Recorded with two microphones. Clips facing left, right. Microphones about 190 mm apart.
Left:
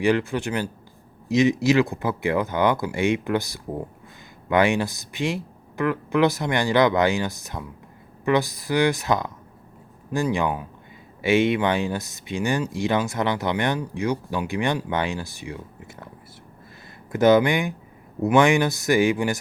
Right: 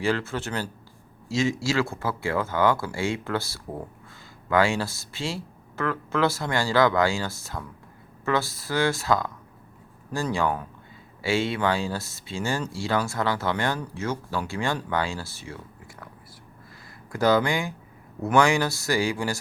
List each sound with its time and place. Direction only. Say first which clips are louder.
0.0 s speech: left 5 dB; 15° left (ahead or behind)
17.1 s speech: left 5 dB; 20° left (ahead or behind)